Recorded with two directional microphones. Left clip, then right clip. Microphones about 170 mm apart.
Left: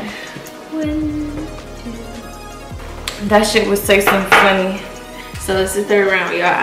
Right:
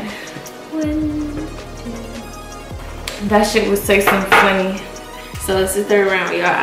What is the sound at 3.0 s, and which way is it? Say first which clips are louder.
A woman's voice: left 2 dB; centre (ahead or behind).